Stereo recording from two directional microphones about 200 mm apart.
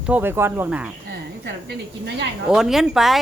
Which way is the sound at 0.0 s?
10° right (ahead or behind).